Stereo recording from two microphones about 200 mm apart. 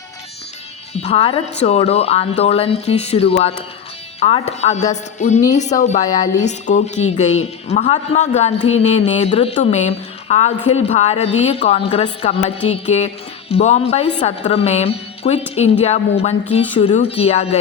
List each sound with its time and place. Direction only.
0.9 s speech: 30° left (ahead or behind)